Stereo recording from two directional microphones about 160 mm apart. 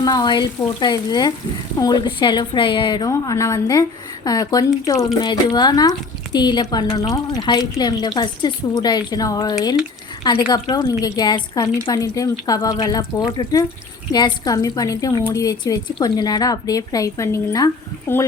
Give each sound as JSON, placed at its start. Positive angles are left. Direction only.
{"t": 0.0, "sound": "a woman's voice", "side_deg": 25}